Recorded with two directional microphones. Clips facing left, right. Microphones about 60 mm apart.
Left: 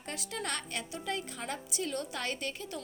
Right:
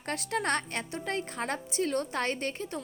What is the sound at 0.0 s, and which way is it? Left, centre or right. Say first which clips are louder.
A woman's voice: right 7 dB; right.